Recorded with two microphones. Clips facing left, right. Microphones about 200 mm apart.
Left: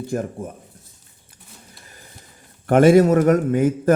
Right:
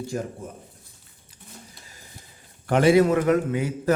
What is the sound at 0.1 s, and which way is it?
Speech, 55° left (ahead or behind).